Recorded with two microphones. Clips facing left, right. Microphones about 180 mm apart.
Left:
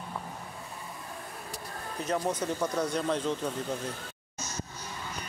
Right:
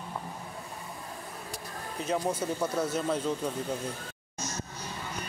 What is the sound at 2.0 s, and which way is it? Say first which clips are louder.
Speech: even; 10° right (ahead or behind).